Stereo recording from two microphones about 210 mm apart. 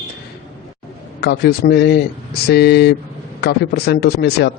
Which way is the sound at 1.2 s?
50° left (ahead or behind).